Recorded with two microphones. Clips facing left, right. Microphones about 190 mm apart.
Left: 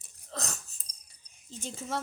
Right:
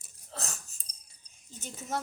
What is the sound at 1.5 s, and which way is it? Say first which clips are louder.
Speech: left 4 dB; 25° left (ahead or behind).